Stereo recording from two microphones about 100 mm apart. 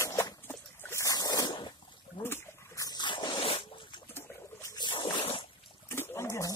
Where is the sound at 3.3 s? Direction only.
70° left (ahead or behind).